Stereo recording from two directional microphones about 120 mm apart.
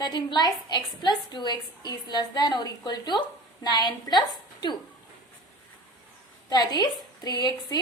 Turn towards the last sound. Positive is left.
turn(degrees=35)  # may be behind; listen again after turning